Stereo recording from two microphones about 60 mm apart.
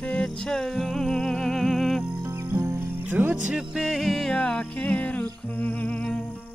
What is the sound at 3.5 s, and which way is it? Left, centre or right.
Music, centre.